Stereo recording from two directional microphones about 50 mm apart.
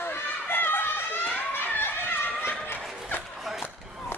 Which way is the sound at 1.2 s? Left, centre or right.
Left.